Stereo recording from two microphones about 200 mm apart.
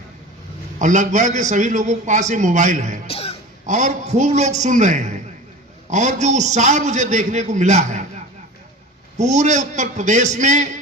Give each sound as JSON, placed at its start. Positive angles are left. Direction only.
{"t": 0.8, "sound": "a man's voice", "side_deg": -40}
{"t": 3.1, "sound": "speech", "side_deg": 30}
{"t": 3.7, "sound": "a man's voice", "side_deg": -35}
{"t": 9.1, "sound": "a man's voice", "side_deg": -35}